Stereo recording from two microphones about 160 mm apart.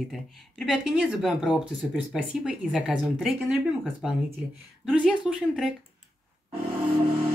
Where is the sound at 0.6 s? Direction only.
5° right (ahead or behind).